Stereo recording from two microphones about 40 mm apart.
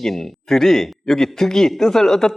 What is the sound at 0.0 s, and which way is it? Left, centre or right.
Speech, centre.